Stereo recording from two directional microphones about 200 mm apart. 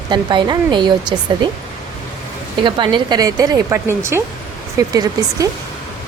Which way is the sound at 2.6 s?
25° right (ahead or behind).